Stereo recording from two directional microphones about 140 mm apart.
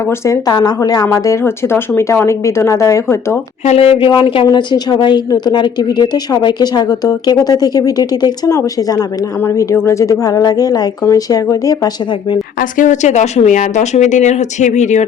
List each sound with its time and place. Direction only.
0.3 s a woman's voice: 30° left (ahead or behind)
3.7 s a woman's voice: 45° left (ahead or behind); by 11.9 s 25° left (ahead or behind)
12.5 s a woman's voice: 70° left (ahead or behind)